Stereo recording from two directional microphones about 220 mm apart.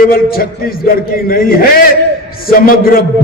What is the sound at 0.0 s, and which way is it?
A man's voice, 40° left (ahead or behind).